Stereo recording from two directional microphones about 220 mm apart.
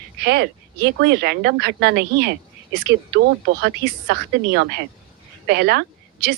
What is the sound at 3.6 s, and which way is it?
A woman's voice, 55° right (ahead or behind).